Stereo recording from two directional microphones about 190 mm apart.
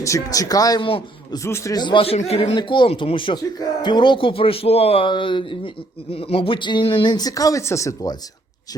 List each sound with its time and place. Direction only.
0.0 s speech: 15° left (ahead or behind)
1.5 s speech: 15° left (ahead or behind)